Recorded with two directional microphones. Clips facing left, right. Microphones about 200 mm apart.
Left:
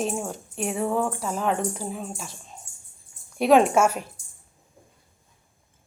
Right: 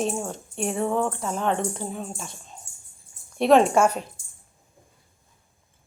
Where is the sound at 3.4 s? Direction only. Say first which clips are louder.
Even; 5° left (ahead or behind).